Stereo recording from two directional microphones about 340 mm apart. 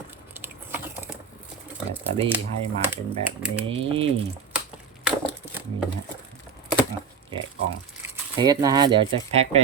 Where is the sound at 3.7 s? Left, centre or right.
Centre.